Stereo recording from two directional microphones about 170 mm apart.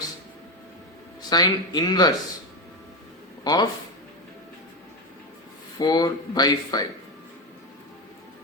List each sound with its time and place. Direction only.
1.3 s speech: 25° left (ahead or behind)
3.4 s speech: 25° left (ahead or behind)
5.8 s speech: 20° left (ahead or behind)